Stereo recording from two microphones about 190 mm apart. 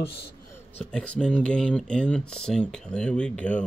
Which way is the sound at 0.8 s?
5° left (ahead or behind).